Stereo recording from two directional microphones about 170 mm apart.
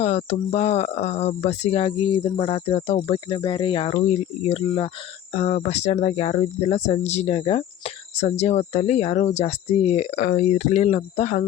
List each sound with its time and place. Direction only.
0.0 s speech: 40° left (ahead or behind)